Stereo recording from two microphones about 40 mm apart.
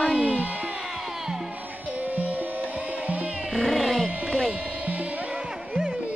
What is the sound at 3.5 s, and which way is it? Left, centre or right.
Roaring cats, centre.